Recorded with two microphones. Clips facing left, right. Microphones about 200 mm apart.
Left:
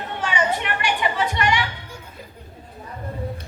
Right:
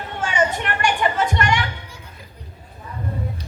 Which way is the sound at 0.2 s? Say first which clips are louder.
Right 2 dB; 50° right (ahead or behind).